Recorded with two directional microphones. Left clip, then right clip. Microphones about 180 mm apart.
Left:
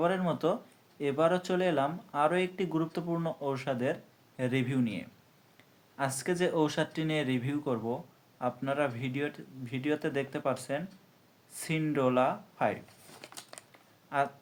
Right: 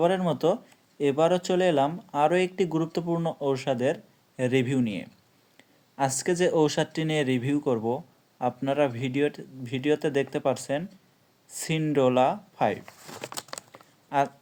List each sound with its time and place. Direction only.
0.0 s speech: 40° right (ahead or behind)